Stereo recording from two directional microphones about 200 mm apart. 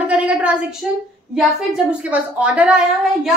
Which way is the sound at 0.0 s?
5° right (ahead or behind).